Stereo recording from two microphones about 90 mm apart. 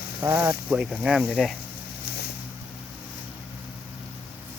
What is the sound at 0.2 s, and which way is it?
Speech, 40° right (ahead or behind).